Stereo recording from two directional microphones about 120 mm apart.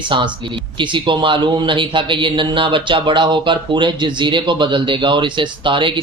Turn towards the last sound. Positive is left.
turn(degrees=-45)  # may be behind; listen again after turning